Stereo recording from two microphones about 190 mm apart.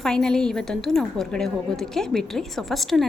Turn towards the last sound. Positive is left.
turn(degrees=0)  # may be behind; listen again after turning